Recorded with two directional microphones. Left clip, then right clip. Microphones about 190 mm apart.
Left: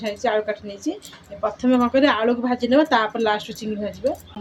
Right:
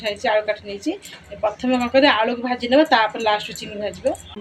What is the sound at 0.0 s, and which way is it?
Speech, 55° left (ahead or behind).